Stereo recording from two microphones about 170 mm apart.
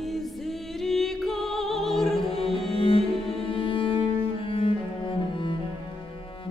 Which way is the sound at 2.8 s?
30° left (ahead or behind).